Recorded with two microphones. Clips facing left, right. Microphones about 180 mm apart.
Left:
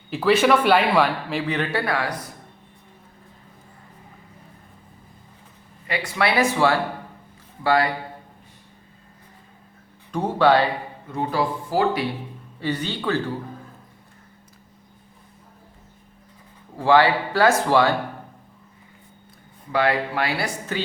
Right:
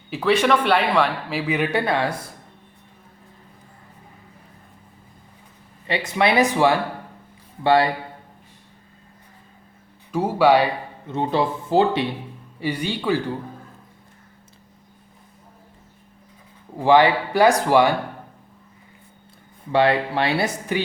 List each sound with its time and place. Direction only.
0.1 s speech: centre (ahead or behind); by 2.2 s 25° right (ahead or behind)
5.9 s speech: 20° right (ahead or behind)
10.1 s speech: 5° right (ahead or behind)
11.1 s speech: 25° right (ahead or behind)
12.5 s speech: 10° right (ahead or behind)
16.7 s speech: 15° right (ahead or behind)
19.7 s speech: 25° right (ahead or behind)
20.7 s speech: 15° right (ahead or behind)